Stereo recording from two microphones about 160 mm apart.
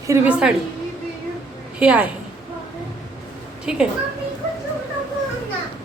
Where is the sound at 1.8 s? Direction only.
5° right (ahead or behind).